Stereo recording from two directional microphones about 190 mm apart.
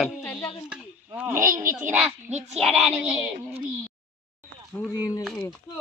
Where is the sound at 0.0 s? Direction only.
Centre (ahead or behind).